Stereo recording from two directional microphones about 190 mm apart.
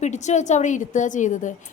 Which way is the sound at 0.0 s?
40° left (ahead or behind).